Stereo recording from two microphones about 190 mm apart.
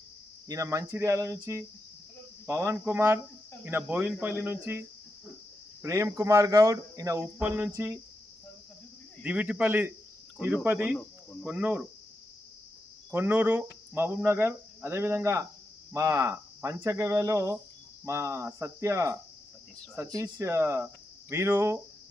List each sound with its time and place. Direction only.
0.4 s speech: 15° right (ahead or behind)
9.2 s speech: 5° right (ahead or behind)
13.1 s speech: 10° right (ahead or behind)